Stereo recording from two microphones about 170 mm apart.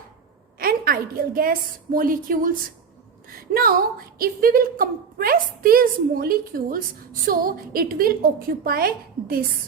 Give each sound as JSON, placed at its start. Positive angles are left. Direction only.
{"t": 0.6, "sound": "a woman's voice", "side_deg": -60}